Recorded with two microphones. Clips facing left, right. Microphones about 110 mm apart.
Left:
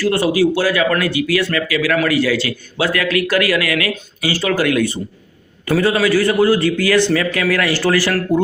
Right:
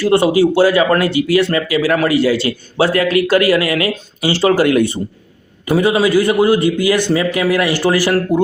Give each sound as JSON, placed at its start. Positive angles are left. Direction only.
{"t": 0.0, "sound": "speech", "side_deg": -25}